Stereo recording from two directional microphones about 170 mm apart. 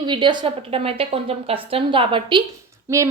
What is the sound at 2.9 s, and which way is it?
Speech, 15° right (ahead or behind).